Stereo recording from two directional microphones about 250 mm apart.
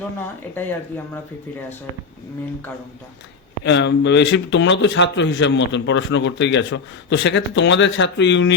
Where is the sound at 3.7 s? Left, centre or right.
Left.